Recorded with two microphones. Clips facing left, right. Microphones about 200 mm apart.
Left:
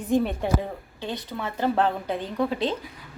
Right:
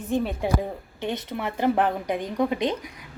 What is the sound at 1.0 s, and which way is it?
Speech, 20° right (ahead or behind).